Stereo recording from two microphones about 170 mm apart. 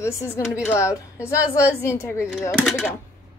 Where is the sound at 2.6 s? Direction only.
Centre (ahead or behind).